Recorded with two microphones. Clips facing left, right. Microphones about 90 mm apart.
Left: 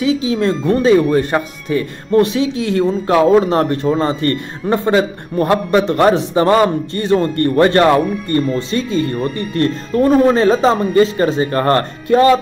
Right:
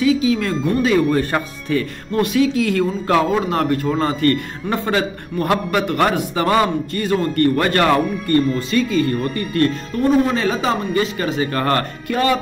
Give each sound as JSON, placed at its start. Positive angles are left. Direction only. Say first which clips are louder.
{"t": 0.0, "sound": "a man's voice", "louder": "left 1 dB", "side_deg": 25}
{"t": 3.3, "sound": "a man's voice", "louder": "left 6 dB", "side_deg": 35}